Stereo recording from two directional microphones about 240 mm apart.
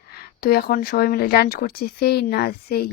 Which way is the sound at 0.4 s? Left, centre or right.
Left.